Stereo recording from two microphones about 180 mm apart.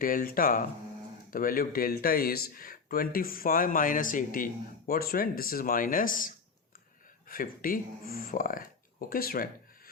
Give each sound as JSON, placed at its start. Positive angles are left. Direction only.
{"t": 0.0, "sound": "speech", "side_deg": 50}